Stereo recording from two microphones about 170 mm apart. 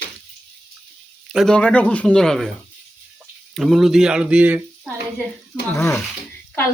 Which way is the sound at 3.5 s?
Centre (ahead or behind).